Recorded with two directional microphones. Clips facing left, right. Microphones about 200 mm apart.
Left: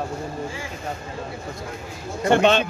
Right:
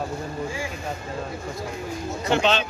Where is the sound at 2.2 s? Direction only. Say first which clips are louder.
Left 5 dB; 50° left (ahead or behind).